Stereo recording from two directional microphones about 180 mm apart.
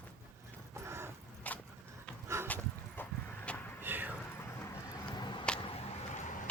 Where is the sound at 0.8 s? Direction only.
15° right (ahead or behind).